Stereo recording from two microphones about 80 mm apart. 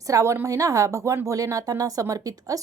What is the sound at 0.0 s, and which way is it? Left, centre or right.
A woman's voice, right.